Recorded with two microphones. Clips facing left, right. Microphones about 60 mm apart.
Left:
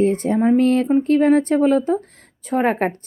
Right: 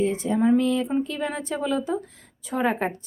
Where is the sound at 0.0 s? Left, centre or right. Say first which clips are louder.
Left 5 dB; left.